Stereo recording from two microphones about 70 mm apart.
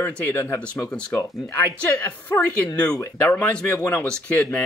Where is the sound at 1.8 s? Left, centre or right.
Left.